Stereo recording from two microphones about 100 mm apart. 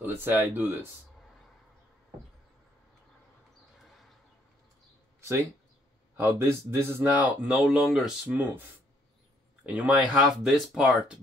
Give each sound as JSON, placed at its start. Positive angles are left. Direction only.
{"t": 0.0, "sound": "speech", "side_deg": -20}
{"t": 6.1, "sound": "speech", "side_deg": -25}
{"t": 7.4, "sound": "speech", "side_deg": -5}
{"t": 8.4, "sound": "speech", "side_deg": -20}
{"t": 10.1, "sound": "speech", "side_deg": -5}